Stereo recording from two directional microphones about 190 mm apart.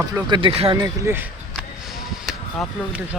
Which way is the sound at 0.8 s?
10° right (ahead or behind).